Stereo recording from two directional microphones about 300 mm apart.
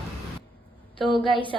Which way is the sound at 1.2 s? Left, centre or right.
Centre.